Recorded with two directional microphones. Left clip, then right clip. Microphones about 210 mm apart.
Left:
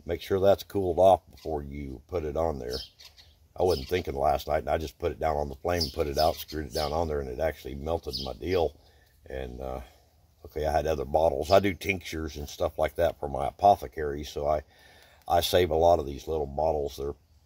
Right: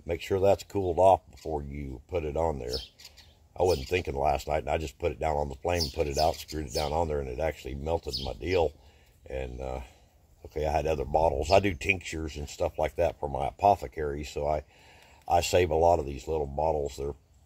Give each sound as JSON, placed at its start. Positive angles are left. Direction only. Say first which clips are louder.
{"t": 0.0, "sound": "speech", "louder": "left 1 dB", "side_deg": 15}